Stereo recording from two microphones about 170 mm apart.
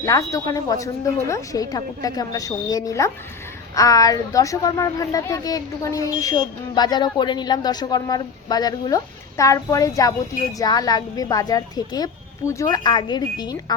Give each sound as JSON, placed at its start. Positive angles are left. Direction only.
{"t": 0.0, "sound": "a woman's voice", "side_deg": 20}